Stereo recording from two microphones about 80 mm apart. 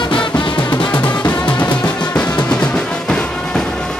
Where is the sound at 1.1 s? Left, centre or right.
Centre.